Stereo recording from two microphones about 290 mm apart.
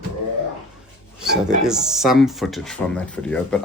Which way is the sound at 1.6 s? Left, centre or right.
Centre.